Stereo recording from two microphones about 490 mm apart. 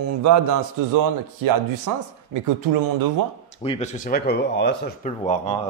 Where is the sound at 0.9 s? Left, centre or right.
Right.